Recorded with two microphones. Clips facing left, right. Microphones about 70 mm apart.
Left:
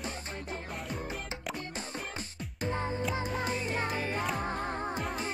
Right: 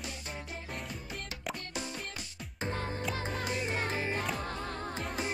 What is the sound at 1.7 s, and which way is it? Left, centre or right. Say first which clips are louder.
Music: left 1 dB; left.